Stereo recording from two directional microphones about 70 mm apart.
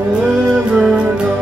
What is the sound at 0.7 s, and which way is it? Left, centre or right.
Music, centre.